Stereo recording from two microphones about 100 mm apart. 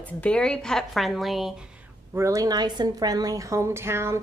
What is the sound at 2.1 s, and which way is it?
A woman's voice, 30° right (ahead or behind).